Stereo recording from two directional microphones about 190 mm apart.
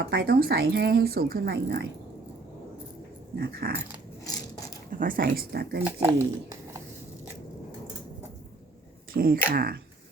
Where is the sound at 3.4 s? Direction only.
55° right (ahead or behind).